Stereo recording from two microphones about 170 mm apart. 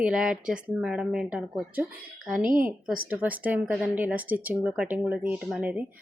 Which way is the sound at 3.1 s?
10° right (ahead or behind).